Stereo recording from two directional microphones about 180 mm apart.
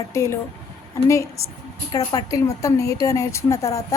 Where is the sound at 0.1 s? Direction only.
15° left (ahead or behind).